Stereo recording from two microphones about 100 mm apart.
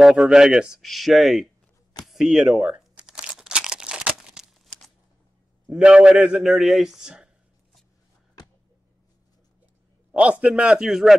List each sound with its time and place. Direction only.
0.0 s speech: 5° right (ahead or behind)
2.0 s crumpling: 5° right (ahead or behind)
5.7 s a man's voice: 10° right (ahead or behind)
8.4 s a sound: 40° left (ahead or behind)
10.1 s a man's voice: 10° right (ahead or behind)